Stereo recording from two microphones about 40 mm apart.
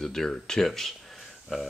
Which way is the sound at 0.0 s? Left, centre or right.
Centre.